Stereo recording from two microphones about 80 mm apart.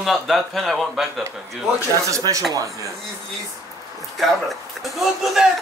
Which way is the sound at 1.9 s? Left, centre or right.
Right.